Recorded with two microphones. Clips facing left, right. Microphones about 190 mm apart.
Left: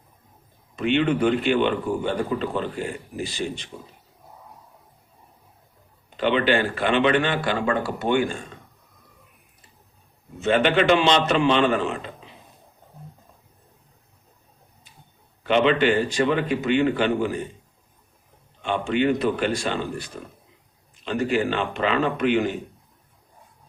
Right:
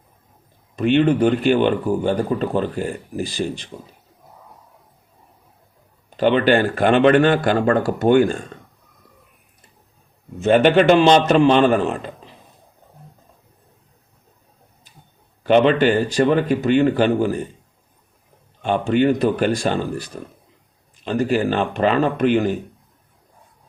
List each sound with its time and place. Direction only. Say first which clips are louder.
0.9 s speech: right 4 dB; 40° right (ahead or behind)
6.1 s speech: right 5 dB; 40° right (ahead or behind)
10.4 s speech: right 6 dB; 45° right (ahead or behind)
15.4 s speech: right 4 dB; 45° right (ahead or behind)
18.6 s speech: right 5 dB; 40° right (ahead or behind)